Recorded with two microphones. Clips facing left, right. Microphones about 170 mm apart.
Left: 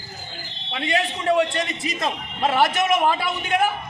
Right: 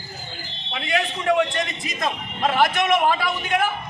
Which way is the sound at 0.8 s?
30° left (ahead or behind).